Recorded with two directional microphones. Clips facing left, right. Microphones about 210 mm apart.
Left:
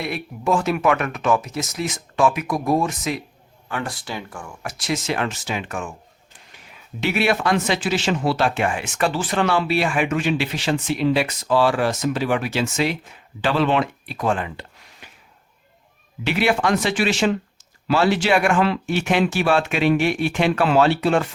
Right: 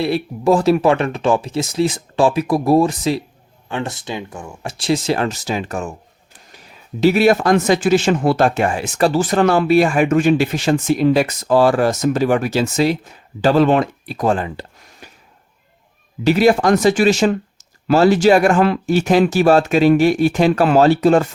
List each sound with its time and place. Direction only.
0.0 s speech: 35° right (ahead or behind)
16.2 s speech: 40° right (ahead or behind)